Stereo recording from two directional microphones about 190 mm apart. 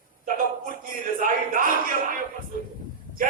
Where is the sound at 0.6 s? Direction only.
45° right (ahead or behind).